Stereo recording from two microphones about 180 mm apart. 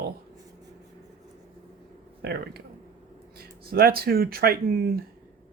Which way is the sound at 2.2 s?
60° right (ahead or behind).